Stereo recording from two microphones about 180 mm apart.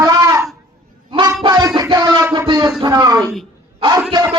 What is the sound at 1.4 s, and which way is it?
Music, 25° right (ahead or behind).